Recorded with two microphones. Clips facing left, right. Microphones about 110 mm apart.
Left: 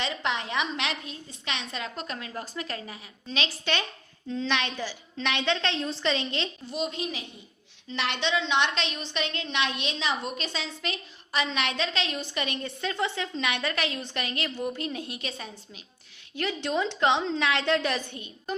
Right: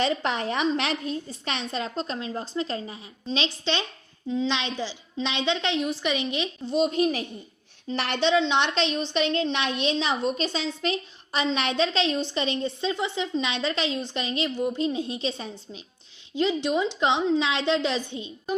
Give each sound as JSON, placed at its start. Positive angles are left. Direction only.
{"t": 0.0, "sound": "a woman's voice", "side_deg": -40}
{"t": 7.0, "sound": "a woman's voice", "side_deg": -45}